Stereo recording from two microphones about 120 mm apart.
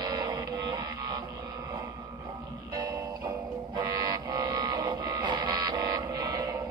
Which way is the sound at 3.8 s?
35° right (ahead or behind).